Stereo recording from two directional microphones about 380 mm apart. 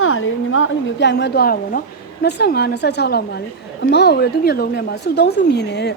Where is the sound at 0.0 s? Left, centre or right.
Left.